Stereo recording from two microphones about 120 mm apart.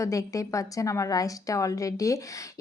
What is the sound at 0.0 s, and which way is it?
A woman's voice, 30° left (ahead or behind).